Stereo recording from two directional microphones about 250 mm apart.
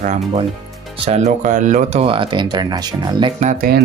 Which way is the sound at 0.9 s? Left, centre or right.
Right.